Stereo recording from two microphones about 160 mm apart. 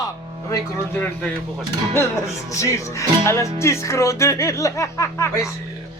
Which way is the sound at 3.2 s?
15° left (ahead or behind).